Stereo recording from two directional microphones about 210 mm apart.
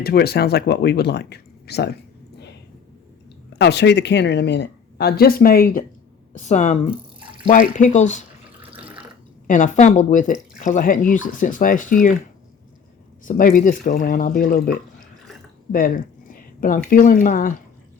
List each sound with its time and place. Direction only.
0.0 s speech: 50° left (ahead or behind)
3.6 s speech: 55° left (ahead or behind); by 6.9 s 35° left (ahead or behind)
6.9 s drip: 25° right (ahead or behind)
7.8 s speech: 35° left (ahead or behind)
9.5 s speech: 35° left (ahead or behind)
13.2 s speech: 40° left (ahead or behind)